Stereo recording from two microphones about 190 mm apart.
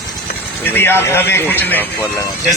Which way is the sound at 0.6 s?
10° left (ahead or behind).